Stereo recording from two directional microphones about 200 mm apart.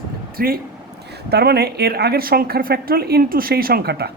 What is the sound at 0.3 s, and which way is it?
Speech, 45° right (ahead or behind).